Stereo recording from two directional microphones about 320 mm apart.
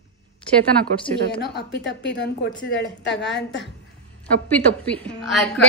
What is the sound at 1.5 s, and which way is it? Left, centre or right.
A woman's voice, left.